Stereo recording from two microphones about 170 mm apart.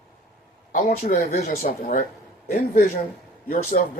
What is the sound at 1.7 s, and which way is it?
Speech, 55° left (ahead or behind).